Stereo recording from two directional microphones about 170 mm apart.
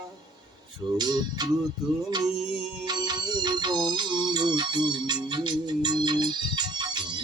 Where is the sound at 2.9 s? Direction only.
25° right (ahead or behind).